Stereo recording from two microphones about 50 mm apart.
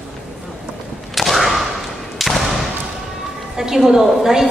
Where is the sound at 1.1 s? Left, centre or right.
Centre.